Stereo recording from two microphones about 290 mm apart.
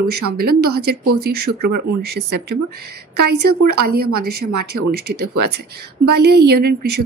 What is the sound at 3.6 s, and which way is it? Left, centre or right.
A woman's voice, right.